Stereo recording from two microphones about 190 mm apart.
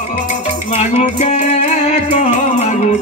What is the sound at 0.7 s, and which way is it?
Music, 35° left (ahead or behind).